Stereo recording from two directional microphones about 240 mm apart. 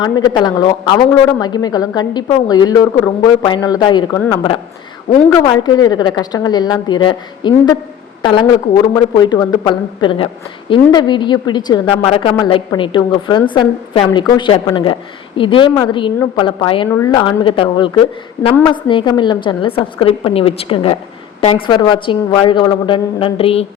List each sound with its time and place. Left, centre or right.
0.0 s a woman's voice: centre
5.3 s a woman's voice: centre